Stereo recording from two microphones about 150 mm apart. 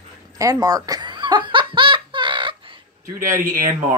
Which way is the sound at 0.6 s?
25° right (ahead or behind).